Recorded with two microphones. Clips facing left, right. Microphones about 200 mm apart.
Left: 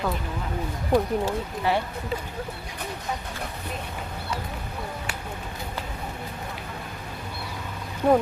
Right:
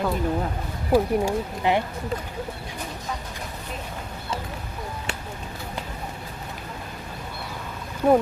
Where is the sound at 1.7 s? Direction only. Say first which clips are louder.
Right 2 dB; 20° right (ahead or behind).